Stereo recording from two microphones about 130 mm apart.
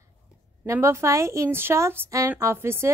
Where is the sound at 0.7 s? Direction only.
20° right (ahead or behind).